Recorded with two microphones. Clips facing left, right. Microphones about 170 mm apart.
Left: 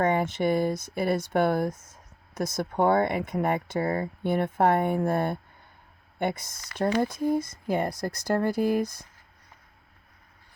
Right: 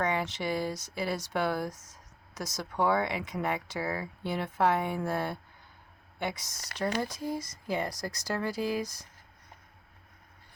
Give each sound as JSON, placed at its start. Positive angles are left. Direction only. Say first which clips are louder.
{"t": 0.0, "sound": "speech", "louder": "left 7 dB", "side_deg": 50}